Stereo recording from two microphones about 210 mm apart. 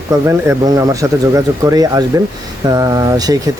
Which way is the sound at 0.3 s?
15° right (ahead or behind).